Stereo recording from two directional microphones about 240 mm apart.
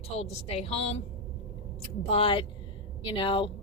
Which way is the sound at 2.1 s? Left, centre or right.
Left.